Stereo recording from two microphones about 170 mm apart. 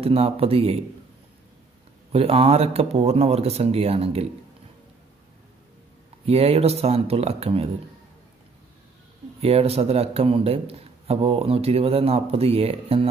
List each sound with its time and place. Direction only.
0.0 s a man's voice: 35° right (ahead or behind)
2.1 s a man's voice: 35° right (ahead or behind)
6.2 s a man's voice: 35° right (ahead or behind)
9.4 s a man's voice: 35° right (ahead or behind)